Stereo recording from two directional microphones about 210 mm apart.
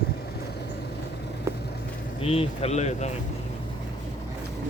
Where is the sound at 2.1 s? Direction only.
30° left (ahead or behind).